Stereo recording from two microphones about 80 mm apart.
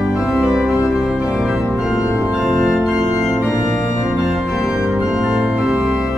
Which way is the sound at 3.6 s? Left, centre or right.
Left.